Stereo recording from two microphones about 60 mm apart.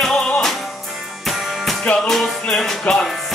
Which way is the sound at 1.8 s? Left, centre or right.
Left.